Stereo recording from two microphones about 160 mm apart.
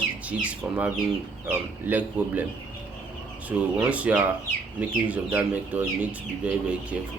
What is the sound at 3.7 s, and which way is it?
Speech, 5° right (ahead or behind).